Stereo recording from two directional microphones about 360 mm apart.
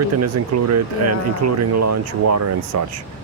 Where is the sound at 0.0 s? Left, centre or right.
Right.